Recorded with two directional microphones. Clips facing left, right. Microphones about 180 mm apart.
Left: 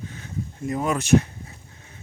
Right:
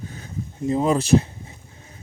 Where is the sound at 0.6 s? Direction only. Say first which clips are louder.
Right 5 dB; 25° right (ahead or behind).